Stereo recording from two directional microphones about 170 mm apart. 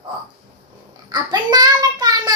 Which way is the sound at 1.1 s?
25° right (ahead or behind).